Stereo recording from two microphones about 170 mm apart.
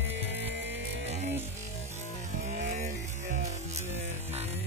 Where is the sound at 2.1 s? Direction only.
45° right (ahead or behind).